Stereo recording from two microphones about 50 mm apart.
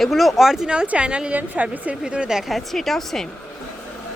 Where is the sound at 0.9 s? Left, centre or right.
Right.